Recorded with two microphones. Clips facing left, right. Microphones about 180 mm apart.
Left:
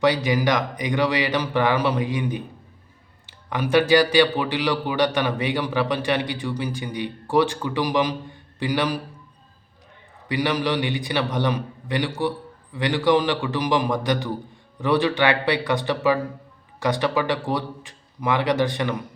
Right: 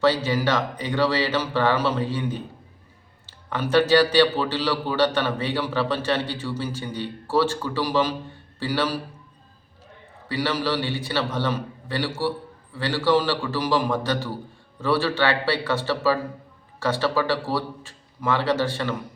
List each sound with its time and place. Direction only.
0.0 s a man's voice: 15° left (ahead or behind)
10.2 s a man's voice: 15° left (ahead or behind)